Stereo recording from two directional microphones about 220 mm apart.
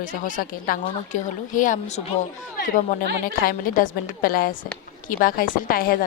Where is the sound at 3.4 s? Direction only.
40° left (ahead or behind).